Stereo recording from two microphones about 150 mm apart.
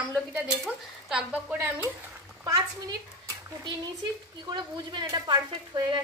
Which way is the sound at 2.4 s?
25° right (ahead or behind).